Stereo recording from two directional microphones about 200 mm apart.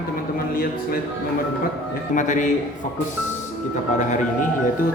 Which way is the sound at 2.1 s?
40° left (ahead or behind).